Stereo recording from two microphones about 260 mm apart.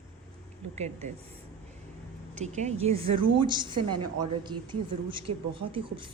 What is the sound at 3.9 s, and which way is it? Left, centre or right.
Speech, right.